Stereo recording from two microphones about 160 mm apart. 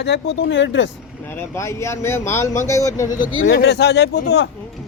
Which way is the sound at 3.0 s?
55° left (ahead or behind).